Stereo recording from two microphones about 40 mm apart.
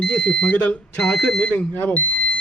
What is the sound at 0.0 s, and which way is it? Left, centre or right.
Speech, left.